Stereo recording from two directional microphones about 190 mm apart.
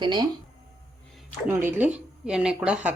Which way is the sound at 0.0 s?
25° right (ahead or behind).